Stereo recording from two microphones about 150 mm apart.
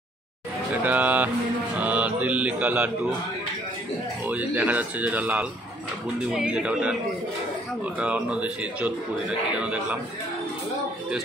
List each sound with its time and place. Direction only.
0.8 s a man's voice: 10° right (ahead or behind)
1.8 s music: 10° right (ahead or behind)
4.3 s a man's voice: 10° right (ahead or behind)